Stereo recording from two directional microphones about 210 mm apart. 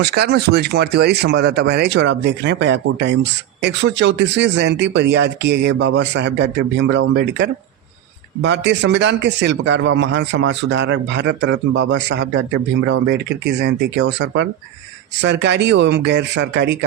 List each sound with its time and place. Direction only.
0.0 s speech: 50° right (ahead or behind)